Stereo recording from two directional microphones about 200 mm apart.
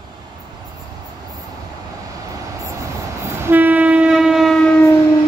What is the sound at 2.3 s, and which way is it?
Vehicle, 15° right (ahead or behind).